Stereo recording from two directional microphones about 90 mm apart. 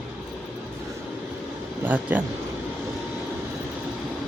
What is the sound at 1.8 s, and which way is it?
Speech, 20° right (ahead or behind).